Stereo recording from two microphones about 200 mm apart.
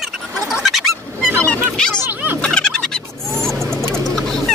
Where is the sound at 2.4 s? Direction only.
5° left (ahead or behind).